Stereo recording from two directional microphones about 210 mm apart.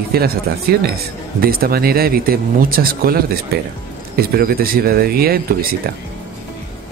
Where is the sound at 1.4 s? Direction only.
45° right (ahead or behind).